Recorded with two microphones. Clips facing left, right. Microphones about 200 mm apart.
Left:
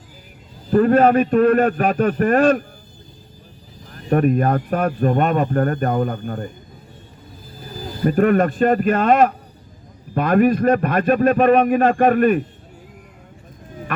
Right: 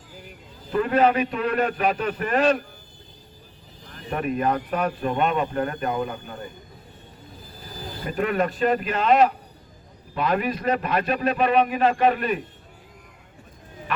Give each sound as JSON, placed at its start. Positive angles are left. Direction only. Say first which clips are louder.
{"t": 0.7, "sound": "speech", "louder": "left 6 dB", "side_deg": 45}
{"t": 3.9, "sound": "speech", "louder": "left 9 dB", "side_deg": 45}
{"t": 8.0, "sound": "speech", "louder": "left 8 dB", "side_deg": 50}